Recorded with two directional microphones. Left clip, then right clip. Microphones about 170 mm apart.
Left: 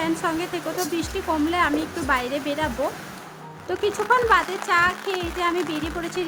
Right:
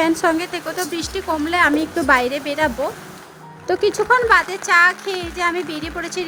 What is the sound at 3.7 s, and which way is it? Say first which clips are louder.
Speech: right 5 dB; 30° right (ahead or behind).